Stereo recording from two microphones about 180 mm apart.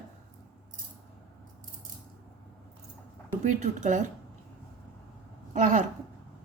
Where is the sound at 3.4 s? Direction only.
40° right (ahead or behind).